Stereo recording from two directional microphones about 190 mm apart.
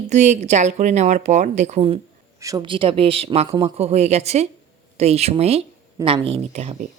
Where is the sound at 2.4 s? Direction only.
20° right (ahead or behind).